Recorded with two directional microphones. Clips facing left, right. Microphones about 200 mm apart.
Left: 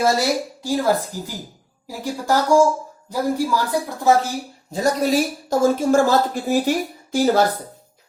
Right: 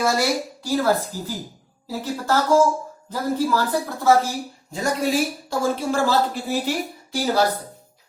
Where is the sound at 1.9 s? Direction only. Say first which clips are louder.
Left 2 dB; 15° left (ahead or behind).